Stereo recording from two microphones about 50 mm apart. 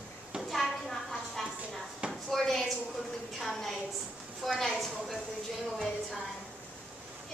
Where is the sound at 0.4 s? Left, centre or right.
Centre.